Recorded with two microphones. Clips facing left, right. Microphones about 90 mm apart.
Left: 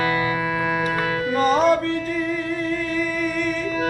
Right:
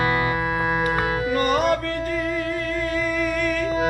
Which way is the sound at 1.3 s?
25° left (ahead or behind).